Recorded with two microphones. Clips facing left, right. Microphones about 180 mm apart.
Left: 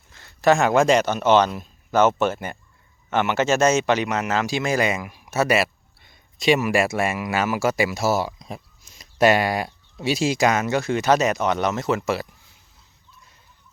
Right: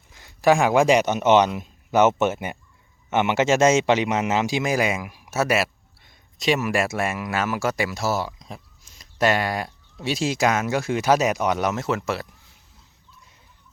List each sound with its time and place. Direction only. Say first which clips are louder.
0.1 s a man's voice: even; 15° right (ahead or behind)